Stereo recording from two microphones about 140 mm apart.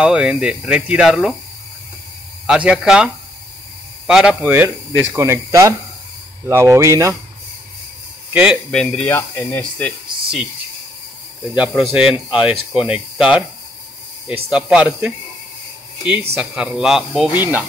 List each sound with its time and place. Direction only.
0.0 s speech: 5° right (ahead or behind)
2.4 s speech: 5° right (ahead or behind)
4.1 s speech: 5° right (ahead or behind)
4.5 s speech: 15° right (ahead or behind)
8.3 s speech: 10° right (ahead or behind)
8.7 s speech: 10° left (ahead or behind)
11.5 s speech: 5° right (ahead or behind)
14.5 s speech: 5° right (ahead or behind)